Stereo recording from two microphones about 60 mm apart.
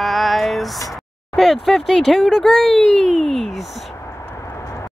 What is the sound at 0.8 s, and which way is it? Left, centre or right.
Speech, centre.